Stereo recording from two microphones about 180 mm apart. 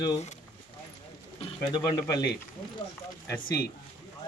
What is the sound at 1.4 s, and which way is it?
Speech, 25° left (ahead or behind).